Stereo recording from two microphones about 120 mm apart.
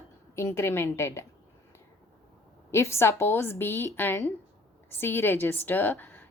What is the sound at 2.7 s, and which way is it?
A woman's voice, 20° left (ahead or behind).